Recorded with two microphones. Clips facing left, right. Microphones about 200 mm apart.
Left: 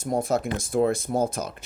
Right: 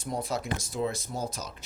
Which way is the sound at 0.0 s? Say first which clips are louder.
Left 8 dB; 45° left (ahead or behind).